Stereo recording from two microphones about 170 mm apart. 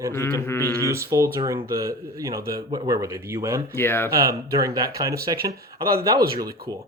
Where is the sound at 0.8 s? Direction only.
20° right (ahead or behind).